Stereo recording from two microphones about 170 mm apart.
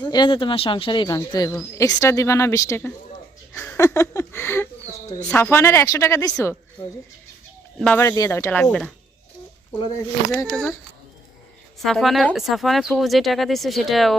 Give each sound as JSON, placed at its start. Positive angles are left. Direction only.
{"t": 0.0, "sound": "a woman's voice", "side_deg": 25}
{"t": 7.8, "sound": "a woman's voice", "side_deg": 5}
{"t": 8.0, "sound": "a woman's voice", "side_deg": 20}
{"t": 10.3, "sound": "speech", "side_deg": 5}
{"t": 11.8, "sound": "speech", "side_deg": 0}